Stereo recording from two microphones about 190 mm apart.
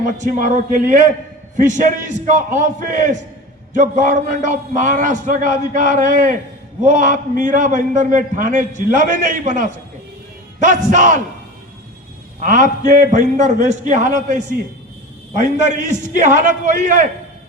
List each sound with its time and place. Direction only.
0.0 s a man's voice: 40° right (ahead or behind)
12.4 s a man's voice: 45° right (ahead or behind)